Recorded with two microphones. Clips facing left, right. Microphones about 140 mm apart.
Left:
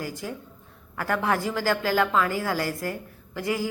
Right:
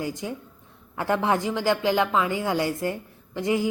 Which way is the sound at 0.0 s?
20° right (ahead or behind).